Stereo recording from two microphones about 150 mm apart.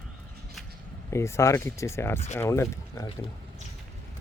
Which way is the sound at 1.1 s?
20° left (ahead or behind).